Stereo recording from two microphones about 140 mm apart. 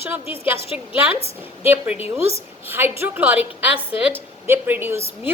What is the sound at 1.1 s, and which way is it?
Speech, 45° left (ahead or behind).